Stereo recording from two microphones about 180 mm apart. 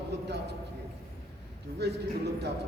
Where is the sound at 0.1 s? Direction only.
65° right (ahead or behind).